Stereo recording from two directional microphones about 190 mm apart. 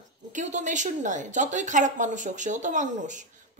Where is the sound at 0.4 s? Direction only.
40° right (ahead or behind).